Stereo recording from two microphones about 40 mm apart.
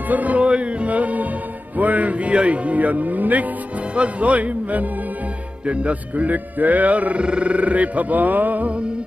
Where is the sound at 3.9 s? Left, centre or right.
Right.